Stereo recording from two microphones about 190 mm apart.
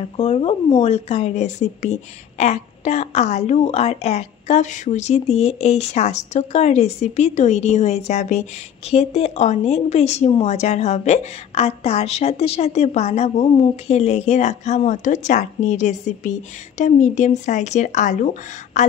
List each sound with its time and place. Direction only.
0.2 s speech: 30° left (ahead or behind)